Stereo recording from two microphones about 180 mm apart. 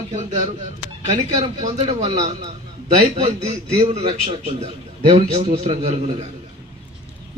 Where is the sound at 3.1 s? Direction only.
35° right (ahead or behind).